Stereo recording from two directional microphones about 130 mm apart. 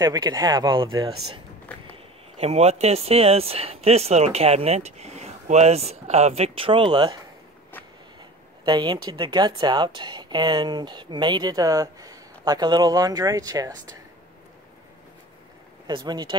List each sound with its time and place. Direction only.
0.0 s speech: 30° right (ahead or behind)
8.6 s speech: 35° right (ahead or behind)
15.9 s speech: 35° right (ahead or behind)